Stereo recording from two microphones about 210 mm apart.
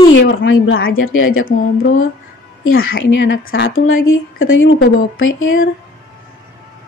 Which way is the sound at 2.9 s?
60° left (ahead or behind).